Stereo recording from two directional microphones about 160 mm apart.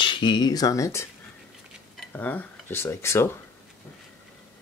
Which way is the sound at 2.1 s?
10° left (ahead or behind).